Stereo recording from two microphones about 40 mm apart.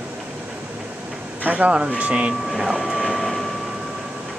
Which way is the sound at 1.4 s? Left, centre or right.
Right.